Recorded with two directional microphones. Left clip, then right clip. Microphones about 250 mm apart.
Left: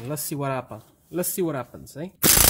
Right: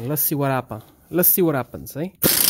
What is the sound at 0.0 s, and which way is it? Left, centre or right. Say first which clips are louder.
Speech: right 6 dB; right.